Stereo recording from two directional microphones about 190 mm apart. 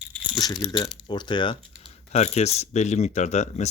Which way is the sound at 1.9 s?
35° left (ahead or behind).